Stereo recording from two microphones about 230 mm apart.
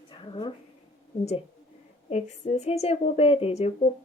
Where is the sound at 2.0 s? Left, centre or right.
Left.